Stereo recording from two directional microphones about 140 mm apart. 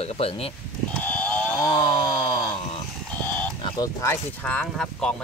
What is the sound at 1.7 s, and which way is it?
Chainsaw, 30° left (ahead or behind).